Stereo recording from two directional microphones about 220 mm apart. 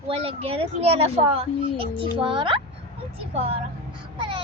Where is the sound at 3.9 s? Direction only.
25° right (ahead or behind).